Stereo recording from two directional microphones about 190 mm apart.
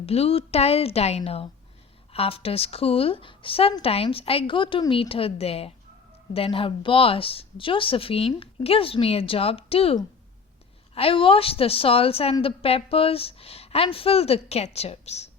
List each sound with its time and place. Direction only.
0.0 s a woman's voice: 30° left (ahead or behind)